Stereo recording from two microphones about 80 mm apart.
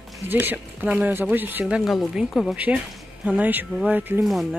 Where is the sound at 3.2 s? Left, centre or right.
Centre.